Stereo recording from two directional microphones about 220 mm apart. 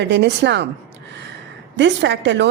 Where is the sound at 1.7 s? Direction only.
55° right (ahead or behind).